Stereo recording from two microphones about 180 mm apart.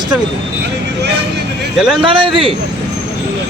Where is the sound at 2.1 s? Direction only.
30° right (ahead or behind).